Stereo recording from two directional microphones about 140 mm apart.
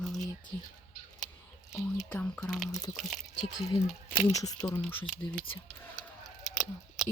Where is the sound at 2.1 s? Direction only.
5° left (ahead or behind).